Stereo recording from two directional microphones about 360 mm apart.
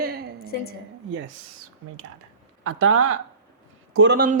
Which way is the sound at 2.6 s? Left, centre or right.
Right.